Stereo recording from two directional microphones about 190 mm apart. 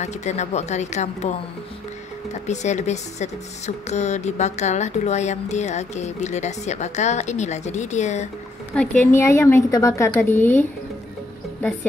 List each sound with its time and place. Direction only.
0.0 s speech: 35° left (ahead or behind)
2.4 s speech: 35° left (ahead or behind)
9.0 s a woman's voice: 15° left (ahead or behind)